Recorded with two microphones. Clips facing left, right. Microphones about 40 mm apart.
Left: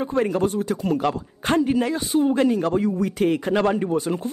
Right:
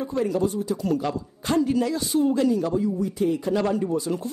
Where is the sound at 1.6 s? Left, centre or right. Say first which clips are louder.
Right 1 dB; left.